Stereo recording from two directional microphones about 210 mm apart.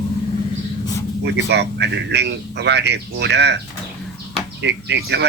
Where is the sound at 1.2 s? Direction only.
55° right (ahead or behind).